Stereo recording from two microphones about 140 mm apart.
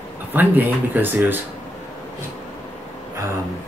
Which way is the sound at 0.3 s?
15° right (ahead or behind).